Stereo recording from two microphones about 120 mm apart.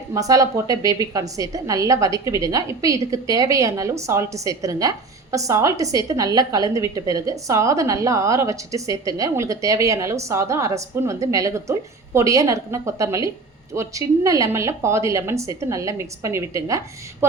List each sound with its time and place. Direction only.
0.1 s a woman's voice: 30° right (ahead or behind)